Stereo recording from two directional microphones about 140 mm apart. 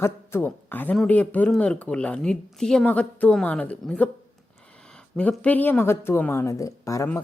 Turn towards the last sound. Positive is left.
turn(degrees=20)  # may be behind; listen again after turning